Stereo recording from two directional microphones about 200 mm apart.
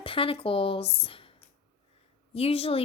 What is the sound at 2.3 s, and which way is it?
Speech, 30° left (ahead or behind).